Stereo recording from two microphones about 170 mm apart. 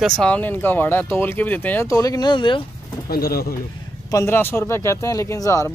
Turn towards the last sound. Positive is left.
turn(degrees=15)  # may be behind; listen again after turning